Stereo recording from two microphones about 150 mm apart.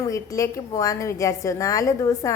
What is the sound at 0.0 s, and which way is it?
A woman's voice, 20° left (ahead or behind).